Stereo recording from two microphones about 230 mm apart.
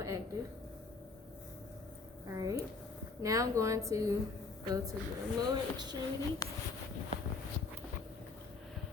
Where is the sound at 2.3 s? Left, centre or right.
Centre.